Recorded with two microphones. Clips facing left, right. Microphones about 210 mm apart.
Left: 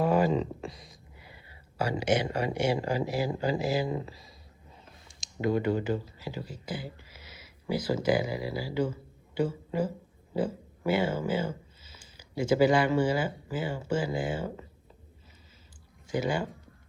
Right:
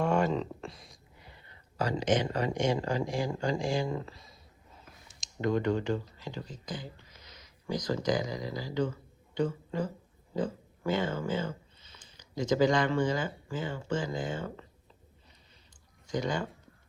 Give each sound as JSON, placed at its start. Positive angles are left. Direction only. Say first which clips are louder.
{"t": 0.0, "sound": "a sound", "louder": "left 3 dB", "side_deg": 5}
{"t": 1.8, "sound": "speech", "louder": "left 1 dB", "side_deg": 10}
{"t": 3.8, "sound": "speech", "louder": "left 2 dB", "side_deg": 15}
{"t": 5.0, "sound": "speech", "louder": "left 2 dB", "side_deg": 5}
{"t": 16.0, "sound": "speech", "louder": "left 2 dB", "side_deg": 10}